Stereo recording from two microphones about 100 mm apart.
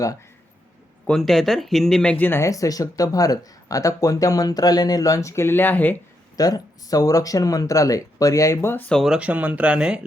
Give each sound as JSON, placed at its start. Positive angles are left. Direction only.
{"t": 1.0, "sound": "speech", "side_deg": 5}
{"t": 2.5, "sound": "speech", "side_deg": 35}
{"t": 6.3, "sound": "speech", "side_deg": 40}
{"t": 9.0, "sound": "speech", "side_deg": -10}